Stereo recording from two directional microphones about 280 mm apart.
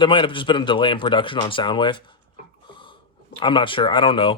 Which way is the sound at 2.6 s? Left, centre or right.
Centre.